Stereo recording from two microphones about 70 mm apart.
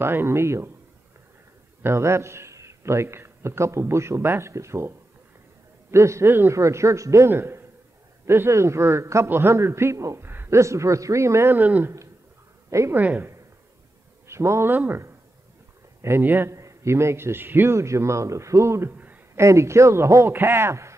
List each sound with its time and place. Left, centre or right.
0.0 s a man's voice: right
1.8 s a man's voice: right
10.3 s a sound: right
10.6 s a man's voice: right
11.5 s speech: right
12.6 s a sound: right
12.9 s speech: right
14.2 s speech: right
16.0 s a man's voice: right
16.4 s a man's voice: right
17.7 s a man's voice: right